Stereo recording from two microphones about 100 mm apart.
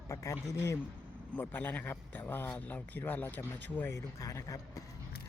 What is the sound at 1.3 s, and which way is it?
Speech, 20° left (ahead or behind).